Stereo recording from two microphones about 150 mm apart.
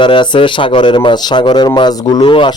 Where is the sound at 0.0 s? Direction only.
30° left (ahead or behind).